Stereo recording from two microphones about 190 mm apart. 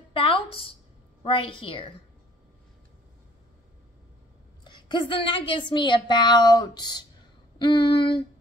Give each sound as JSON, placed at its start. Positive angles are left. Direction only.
{"t": 0.1, "sound": "a sound", "side_deg": 30}
{"t": 1.2, "sound": "speech", "side_deg": 25}
{"t": 4.6, "sound": "speech", "side_deg": 25}